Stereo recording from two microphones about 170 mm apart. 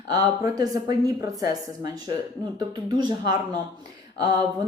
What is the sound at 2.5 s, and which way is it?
Speech, 25° right (ahead or behind).